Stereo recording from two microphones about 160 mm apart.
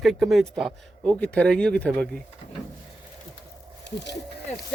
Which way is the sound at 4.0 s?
90° left.